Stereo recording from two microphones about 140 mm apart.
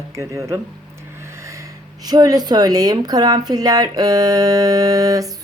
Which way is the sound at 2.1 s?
30° right (ahead or behind).